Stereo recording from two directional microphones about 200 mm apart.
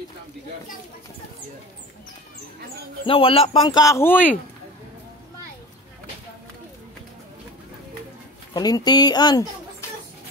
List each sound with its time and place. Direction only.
3.1 s speech: 25° left (ahead or behind); by 4.3 s 10° left (ahead or behind)
8.5 s speech: 20° left (ahead or behind)